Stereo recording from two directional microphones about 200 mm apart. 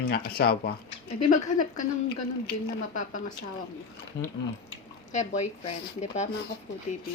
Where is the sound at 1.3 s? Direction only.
40° left (ahead or behind).